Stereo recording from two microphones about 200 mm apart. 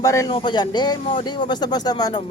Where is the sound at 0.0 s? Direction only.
15° left (ahead or behind).